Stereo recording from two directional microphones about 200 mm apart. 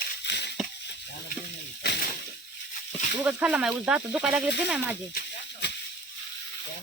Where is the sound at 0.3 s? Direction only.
60° left (ahead or behind).